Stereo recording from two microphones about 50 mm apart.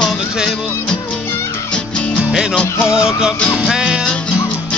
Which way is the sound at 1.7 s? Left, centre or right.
Left.